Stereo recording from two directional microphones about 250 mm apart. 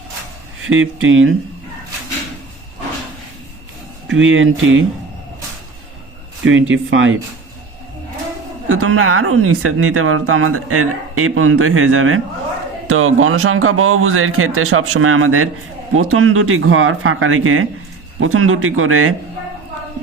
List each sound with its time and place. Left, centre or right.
0.6 s speech: right
4.1 s speech: right
6.4 s speech: right
8.7 s speech: right